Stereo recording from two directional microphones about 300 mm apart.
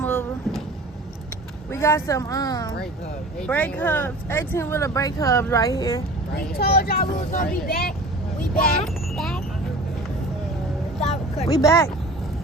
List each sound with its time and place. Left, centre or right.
0.0 s vehicle: centre
1.7 s speech: centre
6.3 s speech: left
8.8 s wind chime: centre
11.0 s speech: left